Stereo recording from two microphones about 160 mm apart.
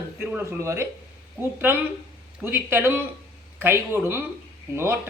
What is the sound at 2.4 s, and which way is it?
Speech, 15° right (ahead or behind).